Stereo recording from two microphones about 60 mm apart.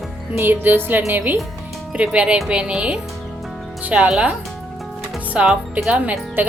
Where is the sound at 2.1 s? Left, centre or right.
Centre.